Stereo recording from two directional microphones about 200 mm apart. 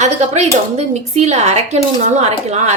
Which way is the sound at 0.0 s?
35° right (ahead or behind).